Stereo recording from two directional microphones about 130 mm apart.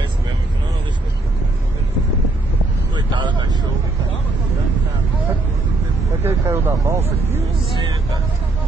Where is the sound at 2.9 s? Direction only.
35° right (ahead or behind).